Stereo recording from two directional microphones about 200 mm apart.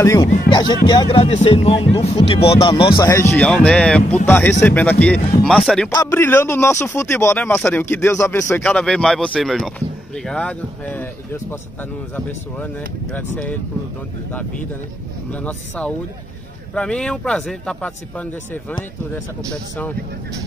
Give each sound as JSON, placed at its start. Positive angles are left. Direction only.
{"t": 0.0, "sound": "speech", "side_deg": 15}
{"t": 3.0, "sound": "speech", "side_deg": 15}
{"t": 15.3, "sound": "speech", "side_deg": 5}